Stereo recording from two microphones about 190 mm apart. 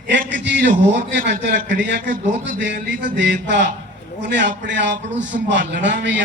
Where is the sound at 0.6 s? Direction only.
50° right (ahead or behind).